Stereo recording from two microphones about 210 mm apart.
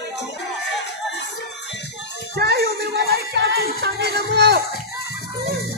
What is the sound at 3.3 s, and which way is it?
Music, 50° right (ahead or behind).